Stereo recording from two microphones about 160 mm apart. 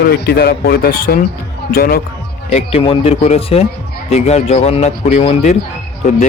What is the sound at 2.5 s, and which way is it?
Speech, 35° left (ahead or behind).